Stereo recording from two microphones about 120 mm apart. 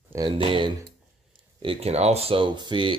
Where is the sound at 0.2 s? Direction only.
45° right (ahead or behind).